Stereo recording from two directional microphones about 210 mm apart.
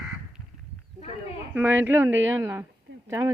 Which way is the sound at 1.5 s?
10° right (ahead or behind).